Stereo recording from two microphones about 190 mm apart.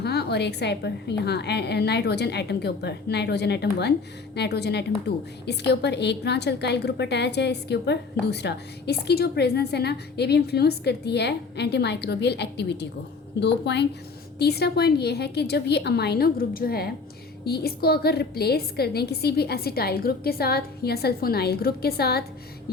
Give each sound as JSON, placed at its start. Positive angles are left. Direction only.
{"t": 0.0, "sound": "a woman's voice", "side_deg": 60}